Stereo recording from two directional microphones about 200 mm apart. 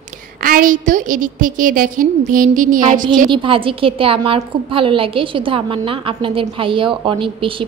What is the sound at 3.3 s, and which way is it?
A woman's voice, 25° right (ahead or behind).